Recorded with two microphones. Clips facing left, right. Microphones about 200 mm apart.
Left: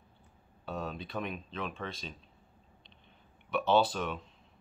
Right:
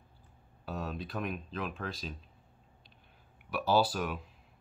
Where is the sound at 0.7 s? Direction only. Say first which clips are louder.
Even; centre (ahead or behind).